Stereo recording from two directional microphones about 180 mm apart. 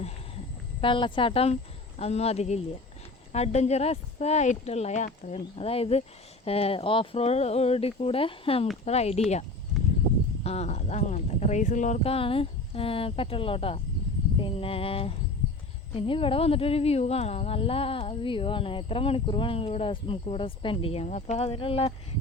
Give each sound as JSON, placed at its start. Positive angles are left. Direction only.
{"t": 0.8, "sound": "speech", "side_deg": 30}
{"t": 10.4, "sound": "speech", "side_deg": 35}